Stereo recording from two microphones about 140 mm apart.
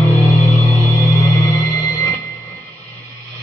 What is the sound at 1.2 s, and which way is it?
Music, 25° left (ahead or behind).